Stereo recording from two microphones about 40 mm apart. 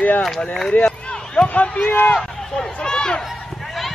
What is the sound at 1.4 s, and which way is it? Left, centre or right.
Speech, left.